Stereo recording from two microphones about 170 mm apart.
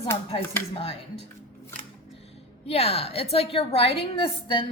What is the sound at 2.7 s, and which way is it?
A woman's voice, 35° left (ahead or behind).